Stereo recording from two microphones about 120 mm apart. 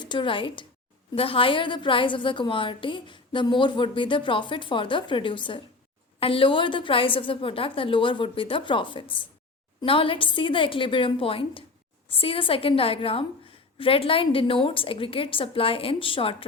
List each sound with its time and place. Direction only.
0.0 s a woman's voice: 40° left (ahead or behind)